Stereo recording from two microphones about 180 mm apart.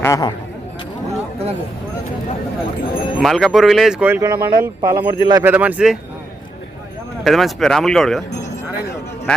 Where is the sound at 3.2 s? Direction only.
Centre (ahead or behind); by 5.5 s 20° right (ahead or behind).